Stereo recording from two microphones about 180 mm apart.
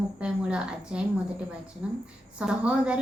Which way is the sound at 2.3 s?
5° right (ahead or behind).